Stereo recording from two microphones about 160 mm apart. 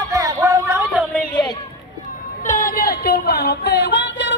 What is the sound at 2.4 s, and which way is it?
Music, 55° left (ahead or behind).